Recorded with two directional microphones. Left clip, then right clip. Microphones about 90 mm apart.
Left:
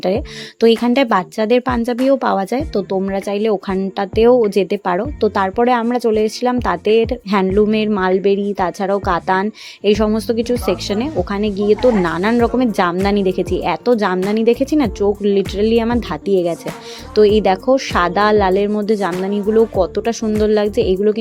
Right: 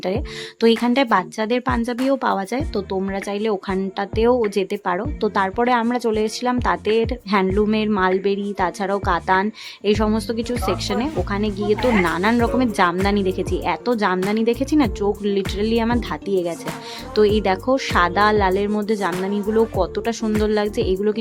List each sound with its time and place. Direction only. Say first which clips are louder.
0.6 s a woman's voice: left 4 dB; 30° left (ahead or behind)